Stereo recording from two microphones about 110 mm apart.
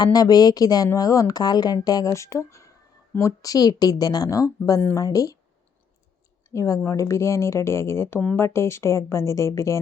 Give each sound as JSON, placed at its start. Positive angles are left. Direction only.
{"t": 0.0, "sound": "speech", "side_deg": 35}
{"t": 6.5, "sound": "speech", "side_deg": 25}